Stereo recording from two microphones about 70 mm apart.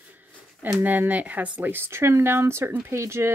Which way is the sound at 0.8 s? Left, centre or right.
Right.